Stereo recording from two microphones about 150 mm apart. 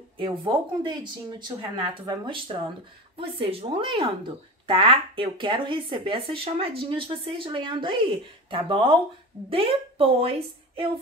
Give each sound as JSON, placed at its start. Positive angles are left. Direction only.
{"t": 0.2, "sound": "speech", "side_deg": -30}